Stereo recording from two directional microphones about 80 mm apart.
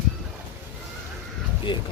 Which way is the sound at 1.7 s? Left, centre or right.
Left.